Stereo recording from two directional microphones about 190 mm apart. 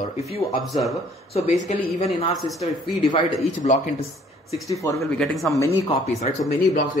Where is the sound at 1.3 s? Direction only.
40° left (ahead or behind).